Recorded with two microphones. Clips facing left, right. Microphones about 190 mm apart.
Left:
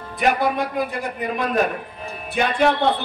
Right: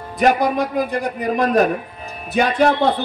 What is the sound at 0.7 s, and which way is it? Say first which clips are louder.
A man's voice: right 4 dB; 45° right (ahead or behind).